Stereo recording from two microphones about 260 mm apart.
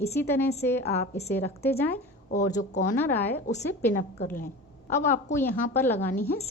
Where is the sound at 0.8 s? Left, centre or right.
Left.